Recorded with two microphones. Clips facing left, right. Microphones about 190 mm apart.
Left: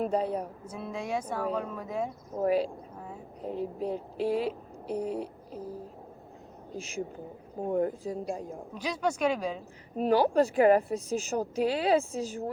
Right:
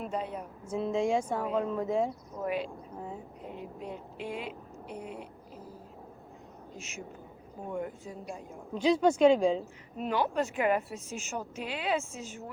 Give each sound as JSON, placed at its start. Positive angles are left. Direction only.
{"t": 0.0, "sound": "a woman's voice", "side_deg": 35}
{"t": 0.8, "sound": "speech", "side_deg": -25}
{"t": 2.4, "sound": "a woman's voice", "side_deg": 35}
{"t": 6.7, "sound": "a woman's voice", "side_deg": 35}
{"t": 8.7, "sound": "speech", "side_deg": -25}
{"t": 10.0, "sound": "a woman's voice", "side_deg": 35}